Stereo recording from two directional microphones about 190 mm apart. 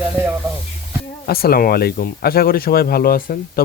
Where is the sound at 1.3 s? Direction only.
55° left (ahead or behind).